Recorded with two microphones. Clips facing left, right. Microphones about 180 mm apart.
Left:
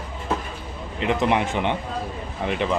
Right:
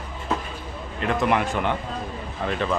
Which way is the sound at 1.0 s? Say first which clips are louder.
Left 1 dB; 20° left (ahead or behind).